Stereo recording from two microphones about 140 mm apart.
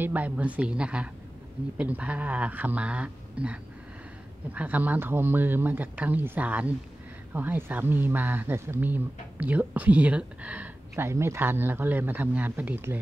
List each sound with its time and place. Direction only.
0.0 s speech: 10° right (ahead or behind)